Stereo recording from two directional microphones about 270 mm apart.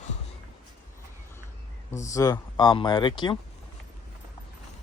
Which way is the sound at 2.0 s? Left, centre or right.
Centre.